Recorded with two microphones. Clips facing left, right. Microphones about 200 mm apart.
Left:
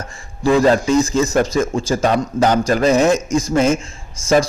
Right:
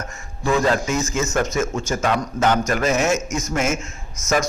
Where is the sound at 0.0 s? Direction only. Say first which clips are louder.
Left 7 dB; 35° left (ahead or behind).